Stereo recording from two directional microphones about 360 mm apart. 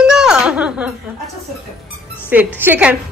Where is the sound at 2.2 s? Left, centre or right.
Centre.